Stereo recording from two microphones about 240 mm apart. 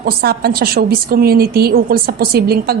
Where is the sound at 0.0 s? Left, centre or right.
Right.